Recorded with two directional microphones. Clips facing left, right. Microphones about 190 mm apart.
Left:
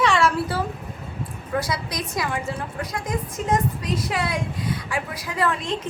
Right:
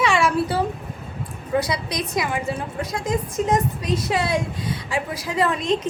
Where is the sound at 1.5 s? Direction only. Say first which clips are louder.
Right 3 dB; 20° right (ahead or behind).